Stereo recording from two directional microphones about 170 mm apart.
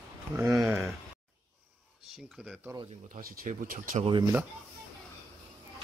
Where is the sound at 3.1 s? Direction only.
50° right (ahead or behind).